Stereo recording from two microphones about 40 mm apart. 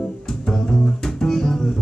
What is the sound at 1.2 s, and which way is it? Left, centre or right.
Music, centre.